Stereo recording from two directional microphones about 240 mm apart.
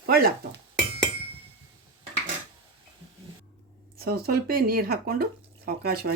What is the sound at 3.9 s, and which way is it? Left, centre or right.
Speech, right.